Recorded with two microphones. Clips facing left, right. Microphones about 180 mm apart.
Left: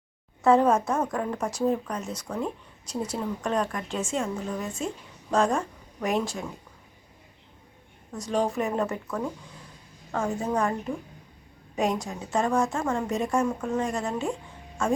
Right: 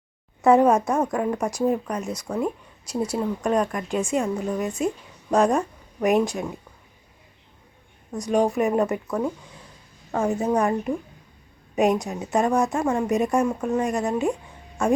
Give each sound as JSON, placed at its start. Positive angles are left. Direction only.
{"t": 0.4, "sound": "a woman's voice", "side_deg": -15}
{"t": 8.1, "sound": "a woman's voice", "side_deg": -15}